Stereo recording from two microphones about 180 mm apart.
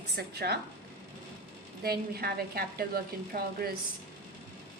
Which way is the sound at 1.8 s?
60° right (ahead or behind).